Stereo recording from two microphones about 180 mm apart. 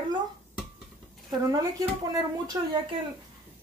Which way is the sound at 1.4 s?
20° right (ahead or behind).